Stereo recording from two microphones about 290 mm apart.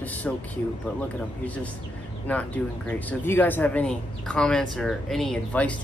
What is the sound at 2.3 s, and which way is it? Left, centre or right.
Speech, centre.